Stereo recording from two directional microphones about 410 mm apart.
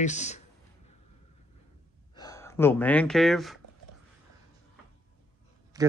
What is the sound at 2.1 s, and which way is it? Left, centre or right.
Speech, centre.